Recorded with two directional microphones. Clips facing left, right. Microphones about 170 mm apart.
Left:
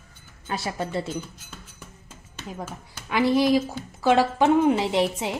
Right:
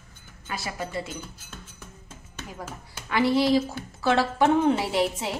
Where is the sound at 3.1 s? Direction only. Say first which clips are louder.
Left 1 dB; 15° left (ahead or behind).